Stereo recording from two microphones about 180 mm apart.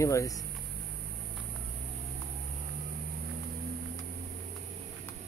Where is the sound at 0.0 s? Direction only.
15° left (ahead or behind).